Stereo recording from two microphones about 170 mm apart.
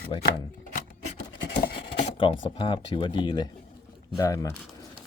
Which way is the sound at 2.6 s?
30° left (ahead or behind).